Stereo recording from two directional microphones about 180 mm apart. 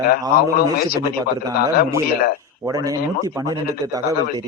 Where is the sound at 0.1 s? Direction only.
55° left (ahead or behind).